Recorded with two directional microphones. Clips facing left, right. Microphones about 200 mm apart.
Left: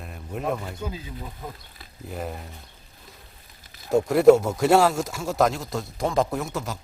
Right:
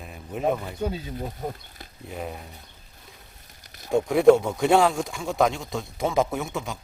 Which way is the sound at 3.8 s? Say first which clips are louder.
Left 1 dB; centre (ahead or behind).